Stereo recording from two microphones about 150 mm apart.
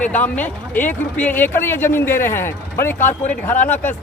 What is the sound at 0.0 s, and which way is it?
Speech, 10° left (ahead or behind).